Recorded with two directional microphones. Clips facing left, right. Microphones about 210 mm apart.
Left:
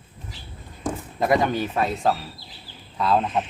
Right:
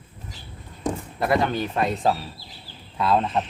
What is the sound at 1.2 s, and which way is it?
Speech, 15° left (ahead or behind).